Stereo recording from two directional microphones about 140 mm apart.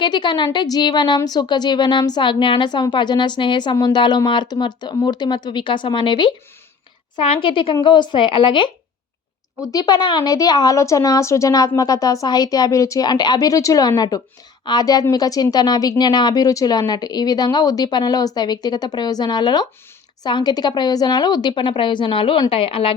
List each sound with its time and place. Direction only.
0.0 s a woman's voice: 35° left (ahead or behind)